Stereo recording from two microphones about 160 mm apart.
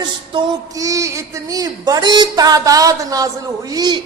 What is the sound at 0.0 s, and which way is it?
Speech, 25° right (ahead or behind).